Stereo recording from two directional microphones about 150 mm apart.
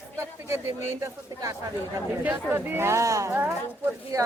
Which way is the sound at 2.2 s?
10° right (ahead or behind).